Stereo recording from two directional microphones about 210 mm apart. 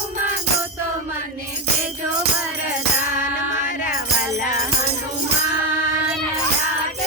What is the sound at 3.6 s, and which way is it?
Music, 40° left (ahead or behind).